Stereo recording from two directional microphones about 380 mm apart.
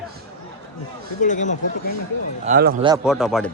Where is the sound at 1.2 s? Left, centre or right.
Centre.